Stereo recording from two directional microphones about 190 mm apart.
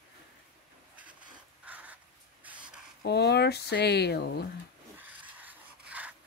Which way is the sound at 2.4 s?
5° right (ahead or behind).